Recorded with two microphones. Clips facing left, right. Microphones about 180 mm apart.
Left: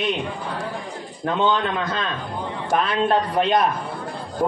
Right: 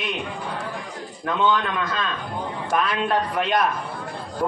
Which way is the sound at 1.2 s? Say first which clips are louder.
Left 1 dB; 30° left (ahead or behind).